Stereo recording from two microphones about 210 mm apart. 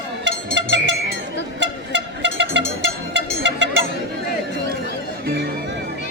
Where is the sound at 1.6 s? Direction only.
60° right (ahead or behind).